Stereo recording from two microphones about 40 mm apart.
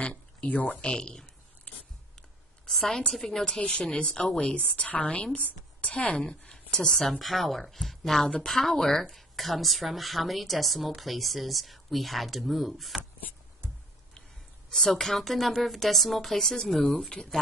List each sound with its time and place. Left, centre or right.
0.0 s a sound: left
0.7 s speech: left
1.7 s a sound: left
3.1 s a woman's voice: centre
4.4 s a woman's voice: left
6.2 s a woman's voice: centre
6.9 s a woman's voice: centre
14.7 s a woman's voice: centre